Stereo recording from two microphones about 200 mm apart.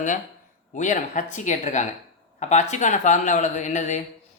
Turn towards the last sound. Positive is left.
turn(degrees=35)  # may be behind; listen again after turning